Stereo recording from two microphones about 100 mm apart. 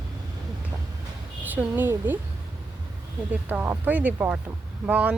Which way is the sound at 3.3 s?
15° right (ahead or behind).